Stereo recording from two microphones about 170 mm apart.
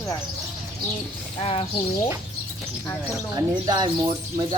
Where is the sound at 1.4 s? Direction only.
35° left (ahead or behind).